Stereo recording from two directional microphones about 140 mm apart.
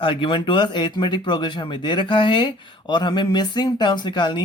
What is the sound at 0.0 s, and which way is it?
Speech, 35° left (ahead or behind).